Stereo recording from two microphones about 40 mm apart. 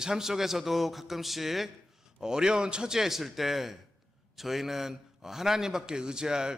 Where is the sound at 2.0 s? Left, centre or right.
Centre.